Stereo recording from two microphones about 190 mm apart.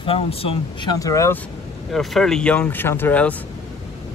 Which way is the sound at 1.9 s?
Centre (ahead or behind).